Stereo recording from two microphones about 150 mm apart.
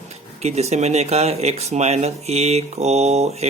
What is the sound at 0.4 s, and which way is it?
Speech, 45° right (ahead or behind).